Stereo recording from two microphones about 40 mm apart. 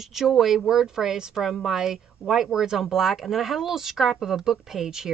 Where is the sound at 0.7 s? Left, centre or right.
Centre.